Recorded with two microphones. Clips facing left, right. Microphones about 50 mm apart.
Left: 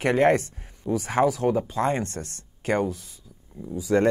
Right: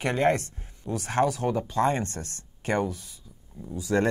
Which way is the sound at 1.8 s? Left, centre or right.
Centre.